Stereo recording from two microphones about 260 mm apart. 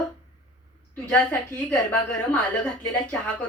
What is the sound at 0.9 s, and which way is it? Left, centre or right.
A woman's voice, centre.